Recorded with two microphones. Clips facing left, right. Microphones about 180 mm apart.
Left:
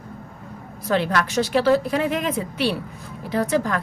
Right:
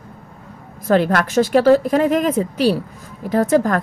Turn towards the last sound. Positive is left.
turn(degrees=-45)  # may be behind; listen again after turning